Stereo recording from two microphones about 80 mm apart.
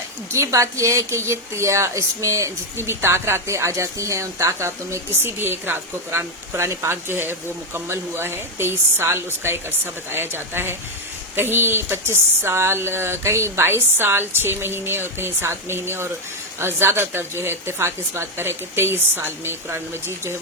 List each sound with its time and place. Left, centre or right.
0.3 s speech: right